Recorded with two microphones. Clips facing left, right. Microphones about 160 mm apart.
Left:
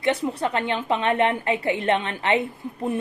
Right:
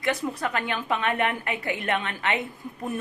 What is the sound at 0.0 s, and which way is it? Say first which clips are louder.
A woman's voice: left 4 dB; 30° left (ahead or behind).